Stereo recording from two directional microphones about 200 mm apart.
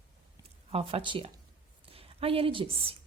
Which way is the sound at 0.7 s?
30° right (ahead or behind).